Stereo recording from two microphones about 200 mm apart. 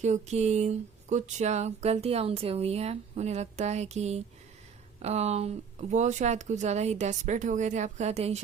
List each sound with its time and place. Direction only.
0.0 s speech: 35° right (ahead or behind)